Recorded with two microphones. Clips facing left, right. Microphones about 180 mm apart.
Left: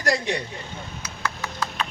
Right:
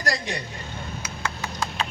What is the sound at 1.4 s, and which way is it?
Clip-clop, 30° right (ahead or behind).